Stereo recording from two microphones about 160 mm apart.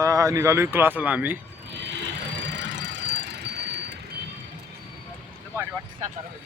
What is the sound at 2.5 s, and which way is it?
Squeal, 90° right.